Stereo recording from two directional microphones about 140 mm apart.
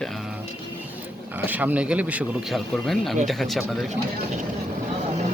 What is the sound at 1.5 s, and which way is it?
A man's voice, 10° right (ahead or behind).